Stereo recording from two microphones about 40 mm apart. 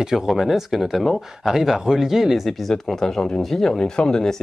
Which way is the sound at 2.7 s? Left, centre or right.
Centre.